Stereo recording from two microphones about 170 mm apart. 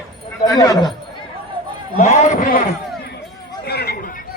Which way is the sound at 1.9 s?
40° left (ahead or behind).